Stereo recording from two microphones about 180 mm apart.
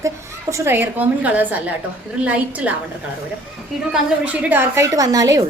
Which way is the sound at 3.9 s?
10° right (ahead or behind).